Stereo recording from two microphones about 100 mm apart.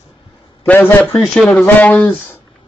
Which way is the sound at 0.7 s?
20° left (ahead or behind).